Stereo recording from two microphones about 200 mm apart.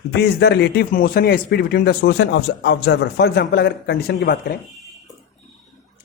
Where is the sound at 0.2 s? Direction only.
55° left (ahead or behind).